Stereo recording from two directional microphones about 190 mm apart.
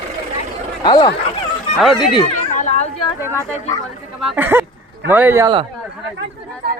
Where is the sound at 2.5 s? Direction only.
40° left (ahead or behind).